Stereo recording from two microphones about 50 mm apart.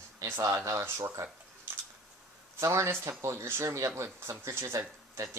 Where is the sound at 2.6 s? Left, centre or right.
Right.